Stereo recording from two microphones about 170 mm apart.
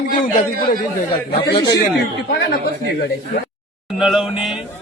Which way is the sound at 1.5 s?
20° left (ahead or behind).